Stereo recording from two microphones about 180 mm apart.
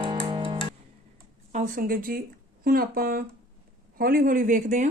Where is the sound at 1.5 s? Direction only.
50° right (ahead or behind).